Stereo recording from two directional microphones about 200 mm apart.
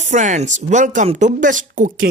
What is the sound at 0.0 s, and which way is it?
Speech, 40° right (ahead or behind).